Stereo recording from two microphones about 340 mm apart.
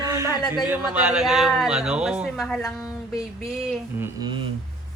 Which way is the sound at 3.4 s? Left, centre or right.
Centre.